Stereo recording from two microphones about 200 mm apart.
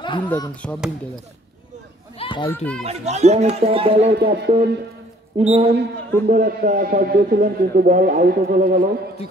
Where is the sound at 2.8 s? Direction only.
35° right (ahead or behind).